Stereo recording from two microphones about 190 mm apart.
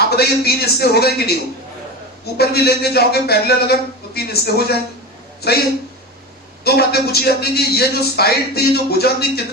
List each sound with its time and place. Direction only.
0.2 s a man's voice: 55° left (ahead or behind)
2.4 s a man's voice: 55° left (ahead or behind)
6.7 s a man's voice: 55° left (ahead or behind)